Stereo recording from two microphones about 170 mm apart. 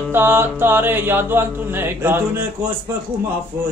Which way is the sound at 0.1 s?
15° right (ahead or behind).